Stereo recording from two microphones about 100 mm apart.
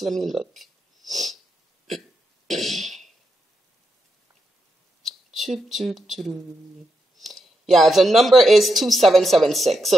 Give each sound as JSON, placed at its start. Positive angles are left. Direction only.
{"t": 0.0, "sound": "speech", "side_deg": 0}
{"t": 1.9, "sound": "burping", "side_deg": 0}
{"t": 5.0, "sound": "speech", "side_deg": 0}